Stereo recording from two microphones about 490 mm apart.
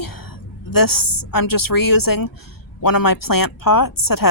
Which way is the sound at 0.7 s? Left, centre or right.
Left.